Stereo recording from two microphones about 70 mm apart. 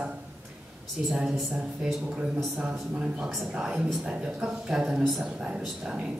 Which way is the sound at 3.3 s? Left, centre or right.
Centre.